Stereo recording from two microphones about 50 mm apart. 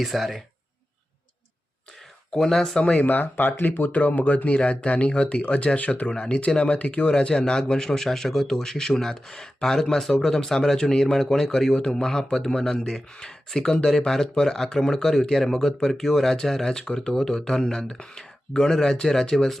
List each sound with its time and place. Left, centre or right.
0.0 s speech: centre
2.3 s speech: centre
2.7 s speech: left
3.9 s speech: left; by 19.5 s centre